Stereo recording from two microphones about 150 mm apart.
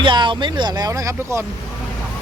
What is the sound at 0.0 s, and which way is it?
Speech, 30° right (ahead or behind).